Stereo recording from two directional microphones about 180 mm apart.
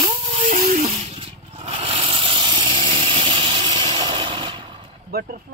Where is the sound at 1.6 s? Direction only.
30° right (ahead or behind).